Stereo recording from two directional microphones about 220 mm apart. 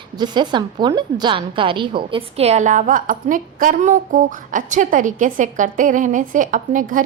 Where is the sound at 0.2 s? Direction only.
20° right (ahead or behind).